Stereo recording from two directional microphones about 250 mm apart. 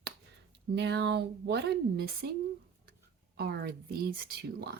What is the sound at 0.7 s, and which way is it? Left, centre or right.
Speech, right.